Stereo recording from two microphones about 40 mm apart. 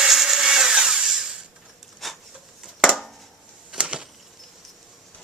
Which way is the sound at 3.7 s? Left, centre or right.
Right.